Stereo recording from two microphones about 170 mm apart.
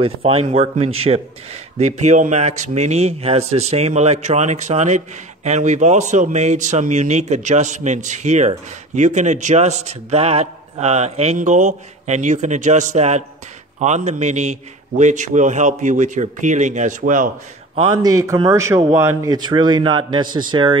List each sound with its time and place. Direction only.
0.0 s a man's voice: 35° right (ahead or behind); by 17.3 s 50° right (ahead or behind)
17.7 s a man's voice: 30° right (ahead or behind)
18.1 s a man's voice: 20° right (ahead or behind)